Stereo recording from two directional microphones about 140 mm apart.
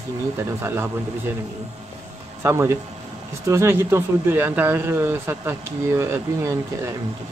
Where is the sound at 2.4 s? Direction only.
20° right (ahead or behind).